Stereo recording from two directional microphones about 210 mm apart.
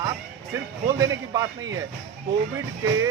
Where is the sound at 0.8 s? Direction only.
15° right (ahead or behind).